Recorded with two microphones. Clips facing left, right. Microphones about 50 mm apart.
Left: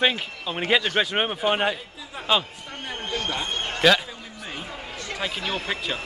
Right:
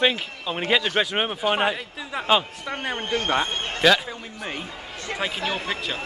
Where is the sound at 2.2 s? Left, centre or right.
Right.